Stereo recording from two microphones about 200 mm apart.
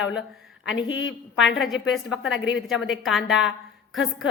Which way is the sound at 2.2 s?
70° left (ahead or behind).